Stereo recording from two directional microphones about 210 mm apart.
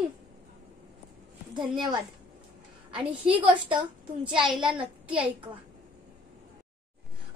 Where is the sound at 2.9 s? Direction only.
5° right (ahead or behind).